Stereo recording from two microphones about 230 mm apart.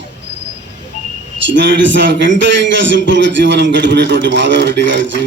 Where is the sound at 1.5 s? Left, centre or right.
Right.